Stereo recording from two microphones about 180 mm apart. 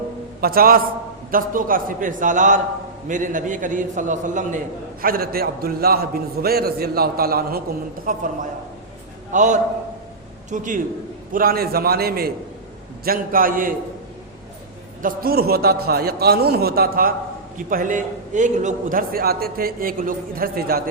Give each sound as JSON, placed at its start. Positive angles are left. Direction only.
{"t": 0.4, "sound": "a man's voice", "side_deg": -55}
{"t": 5.0, "sound": "a man's voice", "side_deg": -55}
{"t": 15.0, "sound": "a man's voice", "side_deg": -55}